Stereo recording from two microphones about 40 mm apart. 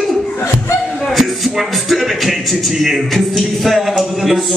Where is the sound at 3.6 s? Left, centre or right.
Centre.